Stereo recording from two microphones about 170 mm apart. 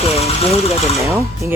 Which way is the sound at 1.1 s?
15° right (ahead or behind).